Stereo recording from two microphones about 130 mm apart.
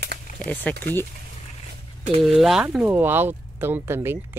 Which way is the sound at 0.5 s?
15° left (ahead or behind).